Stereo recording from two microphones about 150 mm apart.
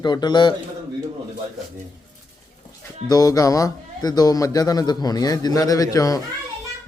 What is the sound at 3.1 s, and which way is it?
A man's voice, 25° left (ahead or behind).